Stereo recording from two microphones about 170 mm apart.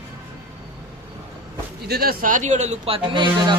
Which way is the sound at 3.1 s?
30° right (ahead or behind).